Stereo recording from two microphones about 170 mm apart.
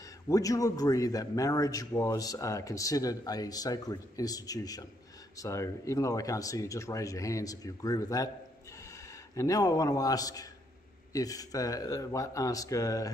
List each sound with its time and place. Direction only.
0.3 s a man's voice: 20° left (ahead or behind)
9.3 s a man's voice: 20° left (ahead or behind)